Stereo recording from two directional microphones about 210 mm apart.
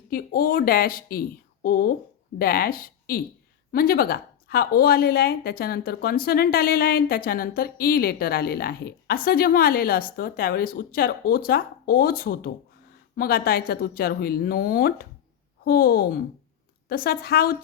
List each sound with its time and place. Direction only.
0.1 s a woman's voice: 45° left (ahead or behind)